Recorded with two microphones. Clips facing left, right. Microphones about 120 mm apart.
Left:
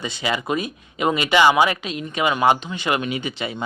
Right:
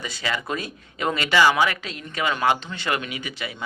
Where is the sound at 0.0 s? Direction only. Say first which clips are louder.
Left 4 dB; 20° left (ahead or behind).